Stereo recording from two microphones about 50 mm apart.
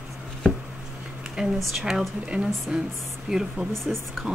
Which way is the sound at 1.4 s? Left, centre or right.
Centre.